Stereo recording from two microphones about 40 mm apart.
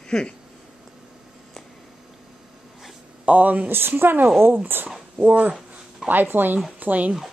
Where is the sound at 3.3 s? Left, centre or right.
Right.